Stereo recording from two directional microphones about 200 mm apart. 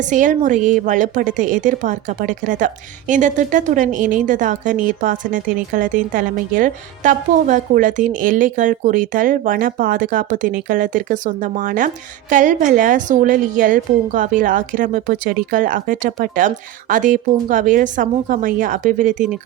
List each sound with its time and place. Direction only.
0.1 s a woman's voice: 40° right (ahead or behind)